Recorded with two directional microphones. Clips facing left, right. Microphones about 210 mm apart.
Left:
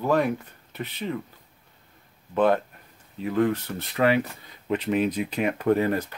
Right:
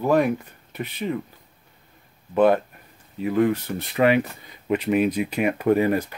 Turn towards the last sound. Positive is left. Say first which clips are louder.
# right 3 dB
turn(degrees=-10)  # may be behind; listen again after turning